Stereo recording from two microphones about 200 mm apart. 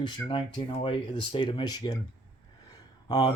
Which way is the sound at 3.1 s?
20° left (ahead or behind).